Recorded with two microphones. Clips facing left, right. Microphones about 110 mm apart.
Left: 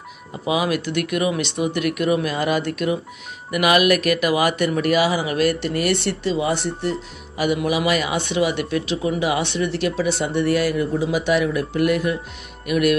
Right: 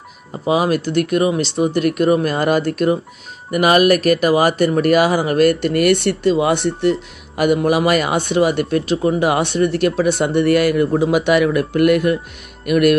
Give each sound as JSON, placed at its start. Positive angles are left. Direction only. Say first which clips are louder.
{"t": 0.5, "sound": "speech", "louder": "right 5 dB", "side_deg": -40}